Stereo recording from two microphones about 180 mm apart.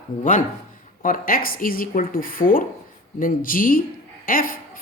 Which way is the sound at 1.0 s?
50° left (ahead or behind).